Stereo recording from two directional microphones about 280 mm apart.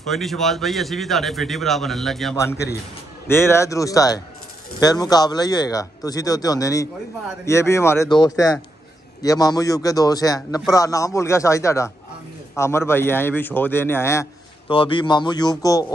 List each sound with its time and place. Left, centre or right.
0.0 s speech: centre